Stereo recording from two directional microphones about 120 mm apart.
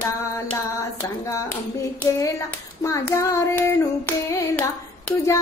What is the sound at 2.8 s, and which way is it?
Child singing, 25° left (ahead or behind).